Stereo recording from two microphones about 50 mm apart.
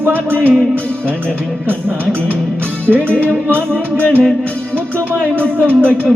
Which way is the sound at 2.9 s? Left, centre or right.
Right.